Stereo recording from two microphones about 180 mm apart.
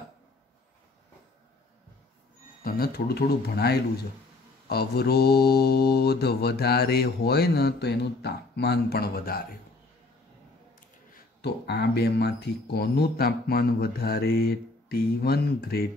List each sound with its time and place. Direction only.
2.6 s mantra: 60° left (ahead or behind)
11.1 s mantra: 65° left (ahead or behind)